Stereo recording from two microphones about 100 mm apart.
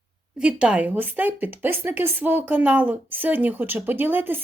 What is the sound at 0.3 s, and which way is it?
A woman's voice, 10° right (ahead or behind).